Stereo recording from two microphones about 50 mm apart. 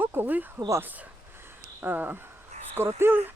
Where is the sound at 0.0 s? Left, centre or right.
Right.